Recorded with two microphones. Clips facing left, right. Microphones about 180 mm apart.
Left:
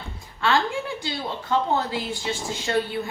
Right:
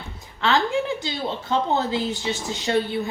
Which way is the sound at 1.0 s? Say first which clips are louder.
Right 2 dB; 20° right (ahead or behind).